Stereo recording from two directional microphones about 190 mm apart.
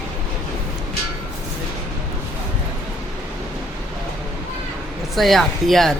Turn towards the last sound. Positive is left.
turn(degrees=0)  # may be behind; listen again after turning